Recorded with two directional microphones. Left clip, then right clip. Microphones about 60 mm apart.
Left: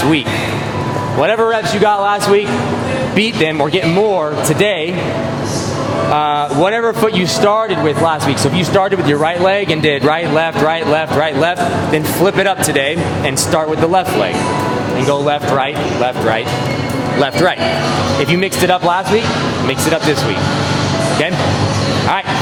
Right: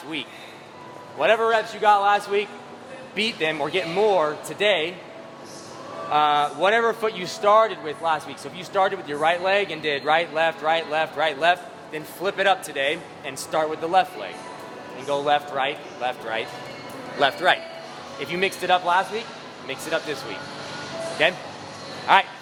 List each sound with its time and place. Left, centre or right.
1.2 s speech: right
6.1 s speech: right
18.3 s speech: right